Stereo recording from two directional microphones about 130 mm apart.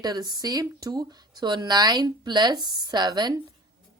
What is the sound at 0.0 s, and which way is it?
Speech, 30° right (ahead or behind).